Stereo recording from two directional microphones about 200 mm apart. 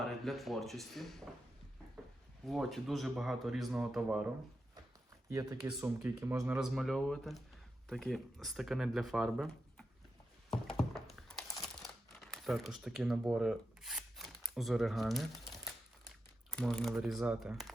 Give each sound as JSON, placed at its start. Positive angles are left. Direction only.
{"t": 0.0, "sound": "speech", "side_deg": 0}
{"t": 2.5, "sound": "speech", "side_deg": 0}
{"t": 5.3, "sound": "speech", "side_deg": -15}
{"t": 6.6, "sound": "speech", "side_deg": 0}
{"t": 10.8, "sound": "crumpling", "side_deg": 0}
{"t": 16.5, "sound": "speech", "side_deg": 5}